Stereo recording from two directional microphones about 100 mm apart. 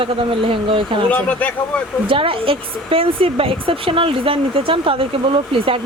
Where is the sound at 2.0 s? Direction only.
60° right (ahead or behind).